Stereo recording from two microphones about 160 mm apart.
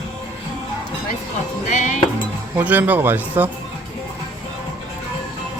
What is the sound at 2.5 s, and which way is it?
Speech, 10° right (ahead or behind).